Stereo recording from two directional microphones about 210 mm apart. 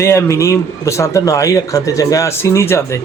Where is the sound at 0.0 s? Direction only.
15° left (ahead or behind).